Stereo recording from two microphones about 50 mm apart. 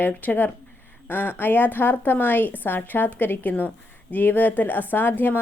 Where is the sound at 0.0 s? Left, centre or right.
Left.